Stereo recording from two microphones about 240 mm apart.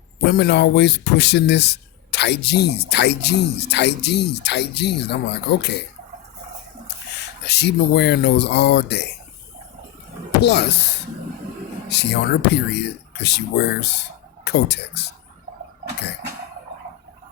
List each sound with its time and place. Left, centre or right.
0.3 s speech: left
6.8 s speech: left
10.4 s speech: left